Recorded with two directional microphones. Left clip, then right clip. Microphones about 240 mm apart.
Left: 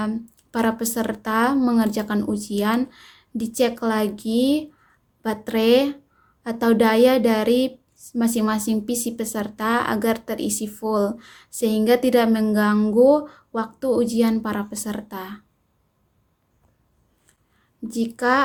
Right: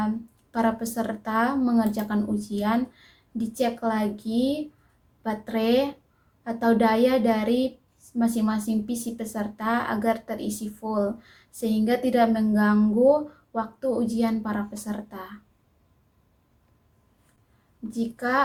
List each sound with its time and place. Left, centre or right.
0.5 s speech: left
17.8 s speech: left